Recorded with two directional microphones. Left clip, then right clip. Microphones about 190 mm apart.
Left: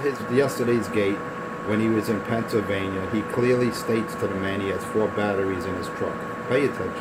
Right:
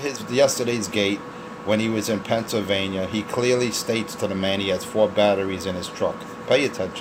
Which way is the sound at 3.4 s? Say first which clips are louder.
Right 1 dB; 5° right (ahead or behind).